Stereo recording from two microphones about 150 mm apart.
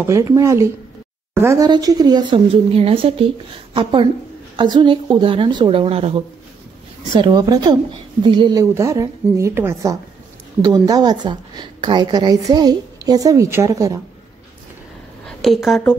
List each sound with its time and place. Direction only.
0.0 s a woman's voice: 20° right (ahead or behind); by 6.2 s 40° right (ahead or behind)
7.2 s a woman's voice: 30° right (ahead or behind)
15.2 s a woman's voice: centre (ahead or behind)